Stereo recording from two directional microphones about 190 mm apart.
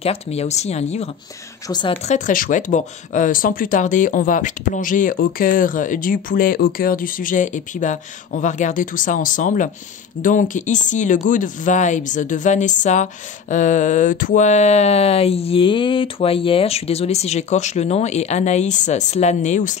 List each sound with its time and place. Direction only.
0.0 s speech: 30° left (ahead or behind)
1.7 s speech: 25° left (ahead or behind)
2.0 s speech: 40° left (ahead or behind)